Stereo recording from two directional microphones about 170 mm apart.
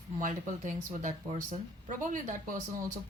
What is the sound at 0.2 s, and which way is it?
Speech, 50° right (ahead or behind).